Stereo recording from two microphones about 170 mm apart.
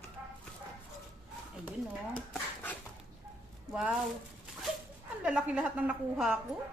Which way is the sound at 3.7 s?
5° right (ahead or behind).